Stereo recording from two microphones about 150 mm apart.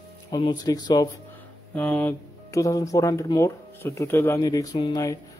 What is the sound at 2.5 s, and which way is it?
Speech, 20° left (ahead or behind).